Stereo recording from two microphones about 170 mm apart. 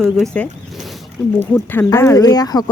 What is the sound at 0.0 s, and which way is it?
Speech, centre (ahead or behind).